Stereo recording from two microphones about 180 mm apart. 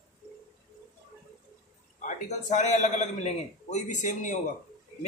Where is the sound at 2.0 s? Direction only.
40° left (ahead or behind).